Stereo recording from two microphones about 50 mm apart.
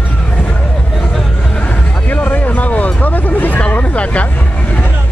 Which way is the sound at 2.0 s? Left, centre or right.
Left.